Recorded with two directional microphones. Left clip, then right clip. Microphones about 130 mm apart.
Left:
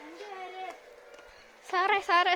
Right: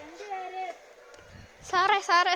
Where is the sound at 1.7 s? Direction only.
5° left (ahead or behind).